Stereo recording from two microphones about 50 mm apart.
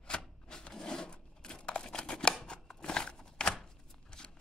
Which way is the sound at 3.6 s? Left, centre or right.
Centre.